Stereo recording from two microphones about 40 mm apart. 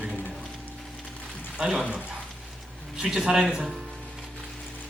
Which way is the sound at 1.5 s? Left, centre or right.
Centre.